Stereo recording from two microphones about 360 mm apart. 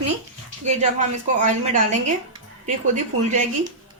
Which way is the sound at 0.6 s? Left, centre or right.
Centre.